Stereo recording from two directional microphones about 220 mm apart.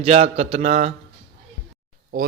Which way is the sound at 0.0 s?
30° right (ahead or behind).